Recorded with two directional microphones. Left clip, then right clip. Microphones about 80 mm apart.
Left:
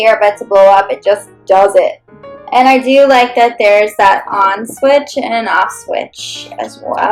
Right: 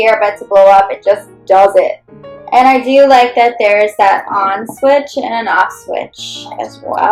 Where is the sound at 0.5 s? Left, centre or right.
Left.